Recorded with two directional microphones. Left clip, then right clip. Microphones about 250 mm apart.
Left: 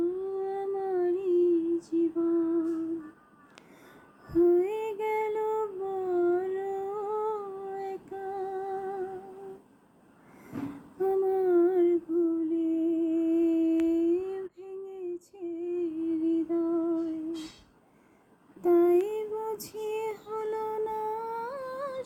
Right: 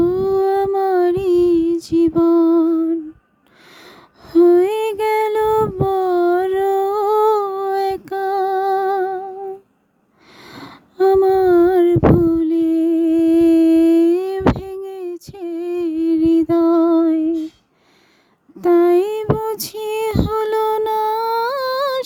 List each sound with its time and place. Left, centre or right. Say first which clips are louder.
0.0 s music: right 15 dB; right
4.4 s child singing: right 12 dB; right
11.0 s a sound: right 14 dB; right
12.5 s humming: right 12 dB; right
18.6 s female singing: right 10 dB; right